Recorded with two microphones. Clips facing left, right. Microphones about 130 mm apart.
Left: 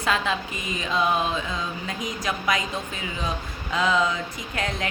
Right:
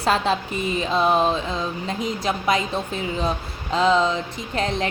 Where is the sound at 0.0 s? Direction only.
35° right (ahead or behind).